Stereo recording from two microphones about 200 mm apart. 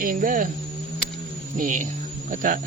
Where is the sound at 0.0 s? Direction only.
45° right (ahead or behind).